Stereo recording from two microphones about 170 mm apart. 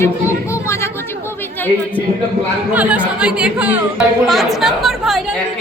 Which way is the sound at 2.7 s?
10° right (ahead or behind).